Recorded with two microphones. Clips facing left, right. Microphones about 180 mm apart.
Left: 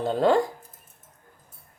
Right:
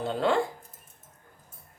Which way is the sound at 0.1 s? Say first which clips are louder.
Left 5 dB; 40° left (ahead or behind).